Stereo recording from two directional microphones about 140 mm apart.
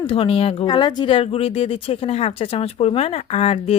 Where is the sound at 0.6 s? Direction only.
30° left (ahead or behind).